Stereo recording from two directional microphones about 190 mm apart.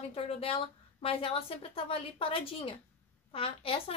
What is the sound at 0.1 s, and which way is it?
A woman's voice, 30° left (ahead or behind).